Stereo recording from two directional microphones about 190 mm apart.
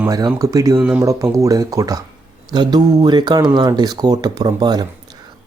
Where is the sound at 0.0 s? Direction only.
20° right (ahead or behind).